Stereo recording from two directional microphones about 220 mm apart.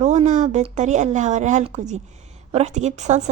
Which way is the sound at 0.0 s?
30° right (ahead or behind).